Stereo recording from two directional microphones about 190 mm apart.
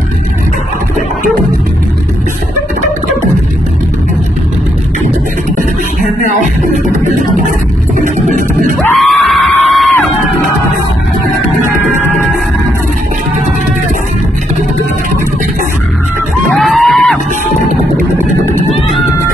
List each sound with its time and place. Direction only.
8.0 s music: 40° right (ahead or behind)
8.7 s yell: centre (ahead or behind)
16.5 s a sound: centre (ahead or behind)